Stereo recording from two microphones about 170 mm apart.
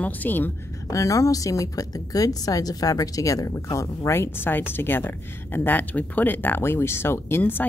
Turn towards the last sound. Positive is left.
turn(degrees=10)  # may be behind; listen again after turning